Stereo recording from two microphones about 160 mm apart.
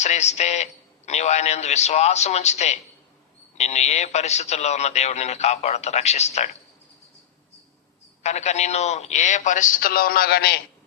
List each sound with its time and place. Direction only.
0.0 s speech: 45° left (ahead or behind)
8.2 s speech: 45° left (ahead or behind); by 10.6 s 85° left